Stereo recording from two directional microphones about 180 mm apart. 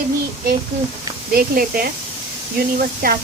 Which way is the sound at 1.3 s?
55° right (ahead or behind).